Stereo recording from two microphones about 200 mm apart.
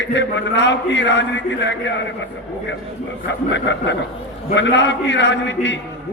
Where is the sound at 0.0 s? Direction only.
65° left (ahead or behind).